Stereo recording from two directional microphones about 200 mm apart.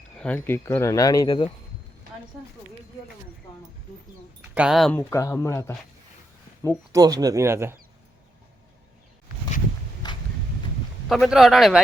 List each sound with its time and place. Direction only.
0.2 s speech: 10° left (ahead or behind)
4.5 s speech: 5° right (ahead or behind)
4.9 s speech: 15° left (ahead or behind)
6.9 s speech: 20° right (ahead or behind)
10.0 s a sound: 20° left (ahead or behind)
11.1 s speech: centre (ahead or behind)